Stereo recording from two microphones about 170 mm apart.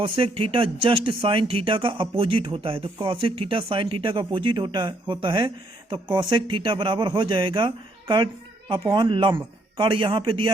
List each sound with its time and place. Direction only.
0.0 s speech: 35° right (ahead or behind)